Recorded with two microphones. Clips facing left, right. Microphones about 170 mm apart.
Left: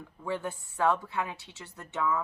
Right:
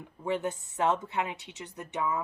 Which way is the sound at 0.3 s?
20° right (ahead or behind).